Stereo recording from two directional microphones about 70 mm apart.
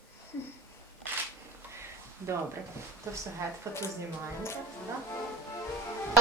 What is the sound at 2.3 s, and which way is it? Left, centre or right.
Speech, right.